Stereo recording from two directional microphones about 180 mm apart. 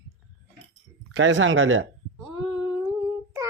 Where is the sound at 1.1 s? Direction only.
90° right.